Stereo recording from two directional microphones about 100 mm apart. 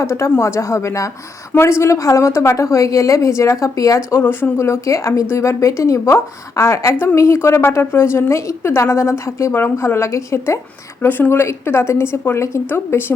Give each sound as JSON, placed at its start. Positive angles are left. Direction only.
{"t": 0.0, "sound": "a woman's voice", "side_deg": 30}